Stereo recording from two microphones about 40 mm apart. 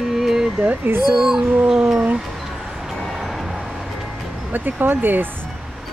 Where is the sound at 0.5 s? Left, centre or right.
Right.